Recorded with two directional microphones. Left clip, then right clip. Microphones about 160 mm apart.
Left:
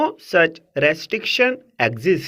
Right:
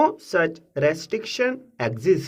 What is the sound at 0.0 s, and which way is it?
Speech, 10° left (ahead or behind).